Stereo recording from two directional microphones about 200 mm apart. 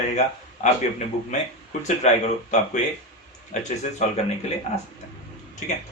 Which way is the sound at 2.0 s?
30° left (ahead or behind).